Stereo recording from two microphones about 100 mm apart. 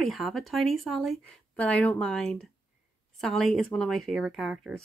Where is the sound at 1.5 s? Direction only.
15° left (ahead or behind).